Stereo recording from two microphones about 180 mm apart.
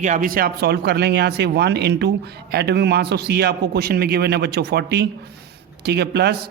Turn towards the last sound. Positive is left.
turn(degrees=-65)  # may be behind; listen again after turning